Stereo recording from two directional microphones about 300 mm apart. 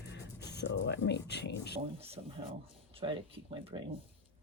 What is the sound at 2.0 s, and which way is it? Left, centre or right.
Speech, centre.